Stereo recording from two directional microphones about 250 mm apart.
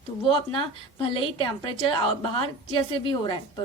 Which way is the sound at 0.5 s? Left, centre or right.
Left.